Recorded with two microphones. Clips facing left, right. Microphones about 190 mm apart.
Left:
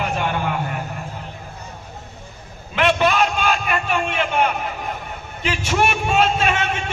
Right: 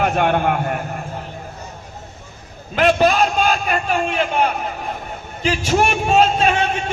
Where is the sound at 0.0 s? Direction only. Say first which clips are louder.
Right 6 dB; 55° right (ahead or behind).